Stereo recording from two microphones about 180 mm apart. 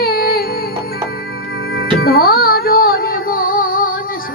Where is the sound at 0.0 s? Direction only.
60° left (ahead or behind).